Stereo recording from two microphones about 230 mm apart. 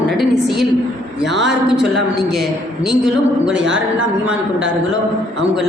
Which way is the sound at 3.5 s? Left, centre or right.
Right.